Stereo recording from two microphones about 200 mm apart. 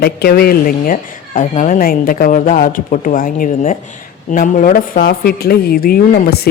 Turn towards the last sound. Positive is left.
turn(degrees=50)  # may be behind; listen again after turning